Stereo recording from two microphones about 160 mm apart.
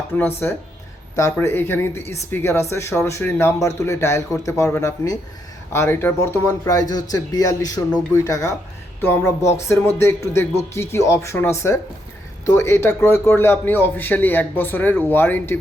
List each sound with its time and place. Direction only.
0.2 s speech: 15° left (ahead or behind)